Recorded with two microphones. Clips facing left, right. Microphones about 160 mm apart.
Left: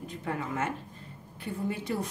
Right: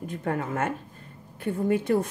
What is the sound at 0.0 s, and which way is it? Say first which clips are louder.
A woman's voice: right 5 dB; 50° right (ahead or behind).